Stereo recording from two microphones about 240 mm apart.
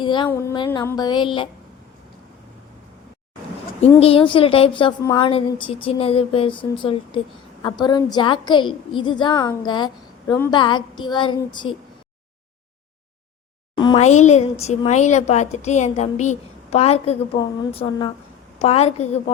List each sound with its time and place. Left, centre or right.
0.0 s a woman's voice: centre
0.3 s a sound: centre
4.0 s a woman's voice: left
13.7 s a woman's voice: left